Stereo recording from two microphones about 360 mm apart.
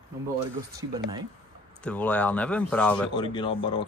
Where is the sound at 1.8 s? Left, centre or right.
Centre.